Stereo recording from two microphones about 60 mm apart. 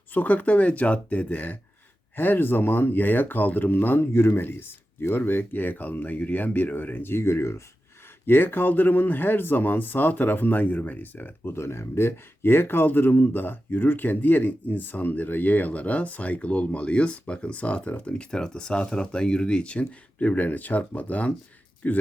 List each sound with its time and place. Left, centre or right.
0.1 s speech: left
4.1 s speech: left
8.3 s speech: left